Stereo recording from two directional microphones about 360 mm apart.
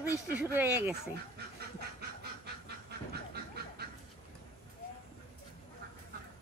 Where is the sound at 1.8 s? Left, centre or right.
Right.